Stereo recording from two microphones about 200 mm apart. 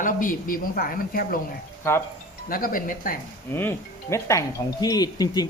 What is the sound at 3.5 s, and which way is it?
Speech, 10° left (ahead or behind).